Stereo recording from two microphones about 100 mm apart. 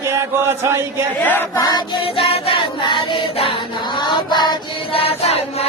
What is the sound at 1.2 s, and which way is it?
Choir, 20° left (ahead or behind).